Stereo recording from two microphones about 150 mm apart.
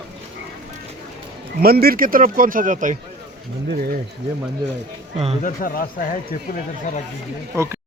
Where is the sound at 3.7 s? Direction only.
80° right.